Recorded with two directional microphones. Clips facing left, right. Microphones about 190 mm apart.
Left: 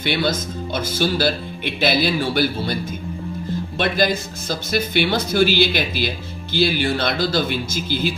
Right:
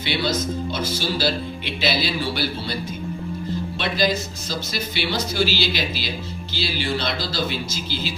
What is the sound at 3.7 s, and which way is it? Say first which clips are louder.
Speech: left 3 dB; 50° left (ahead or behind).